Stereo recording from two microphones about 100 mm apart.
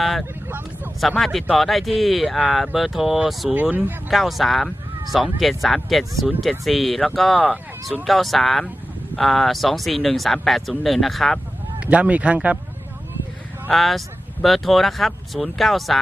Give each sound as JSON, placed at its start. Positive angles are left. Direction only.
{"t": 0.0, "sound": "speech", "side_deg": 0}
{"t": 3.5, "sound": "speech", "side_deg": -15}
{"t": 4.1, "sound": "speech", "side_deg": 0}
{"t": 11.8, "sound": "speech", "side_deg": -15}
{"t": 13.7, "sound": "speech", "side_deg": 0}